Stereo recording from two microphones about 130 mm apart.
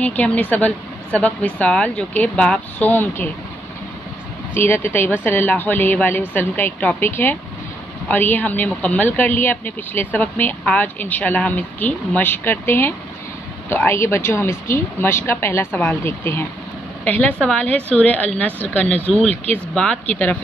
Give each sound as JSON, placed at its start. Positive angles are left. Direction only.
{"t": 0.0, "sound": "speech", "side_deg": 10}
{"t": 4.6, "sound": "speech", "side_deg": 15}